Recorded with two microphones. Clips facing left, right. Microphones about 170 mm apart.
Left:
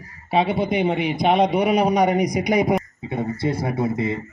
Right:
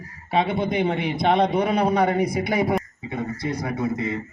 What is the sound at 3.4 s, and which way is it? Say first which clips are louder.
Speech: left 5 dB; 30° left (ahead or behind).